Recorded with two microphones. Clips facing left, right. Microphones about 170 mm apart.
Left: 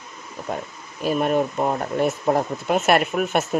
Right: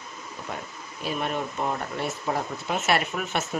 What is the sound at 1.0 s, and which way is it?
Speech, 45° left (ahead or behind).